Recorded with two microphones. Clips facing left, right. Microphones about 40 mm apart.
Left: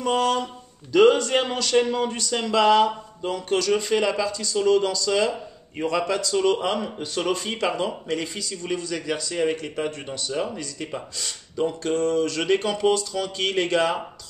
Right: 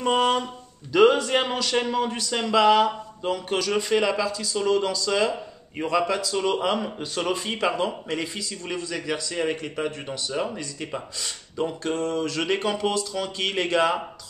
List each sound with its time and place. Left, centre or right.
0.0 s speech: right
0.9 s speech: centre